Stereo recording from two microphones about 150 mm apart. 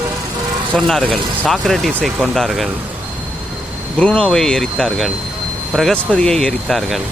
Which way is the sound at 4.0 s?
5° left (ahead or behind).